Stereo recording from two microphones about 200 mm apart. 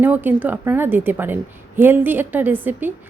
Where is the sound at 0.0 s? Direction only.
10° right (ahead or behind).